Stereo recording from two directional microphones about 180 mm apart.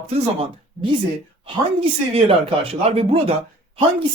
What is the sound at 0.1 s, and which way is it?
Speech, 30° right (ahead or behind).